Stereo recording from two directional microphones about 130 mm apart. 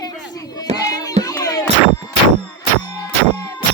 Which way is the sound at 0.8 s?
30° left (ahead or behind).